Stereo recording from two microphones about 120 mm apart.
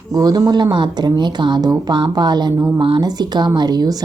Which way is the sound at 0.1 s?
30° right (ahead or behind).